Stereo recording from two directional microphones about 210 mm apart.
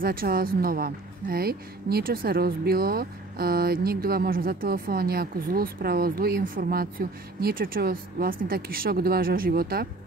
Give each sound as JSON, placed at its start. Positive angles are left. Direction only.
{"t": 0.0, "sound": "speech", "side_deg": -45}